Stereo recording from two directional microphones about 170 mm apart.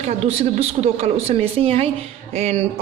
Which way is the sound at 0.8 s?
35° right (ahead or behind).